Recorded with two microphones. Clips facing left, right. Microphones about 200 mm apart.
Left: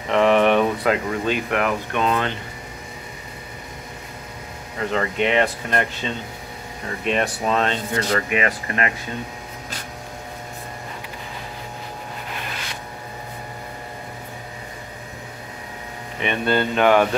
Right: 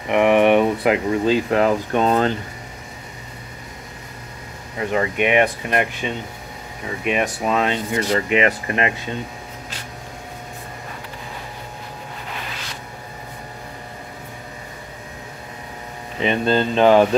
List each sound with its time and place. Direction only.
0.1 s speech: 15° right (ahead or behind); by 2.3 s 35° right (ahead or behind)
4.7 s speech: 15° right (ahead or behind)
16.2 s speech: 30° right (ahead or behind)